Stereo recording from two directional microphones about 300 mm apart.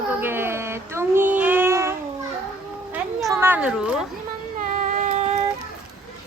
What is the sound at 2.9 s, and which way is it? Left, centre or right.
Children playing, centre.